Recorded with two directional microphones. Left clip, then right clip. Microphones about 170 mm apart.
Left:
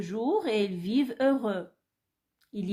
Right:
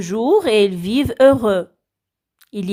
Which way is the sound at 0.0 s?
60° right (ahead or behind).